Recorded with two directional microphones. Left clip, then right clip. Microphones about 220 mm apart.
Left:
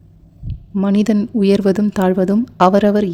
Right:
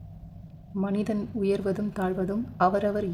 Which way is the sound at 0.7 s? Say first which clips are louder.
Left 12 dB; 40° left (ahead or behind).